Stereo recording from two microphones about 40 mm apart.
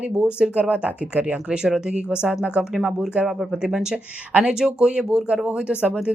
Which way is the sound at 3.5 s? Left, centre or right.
Centre.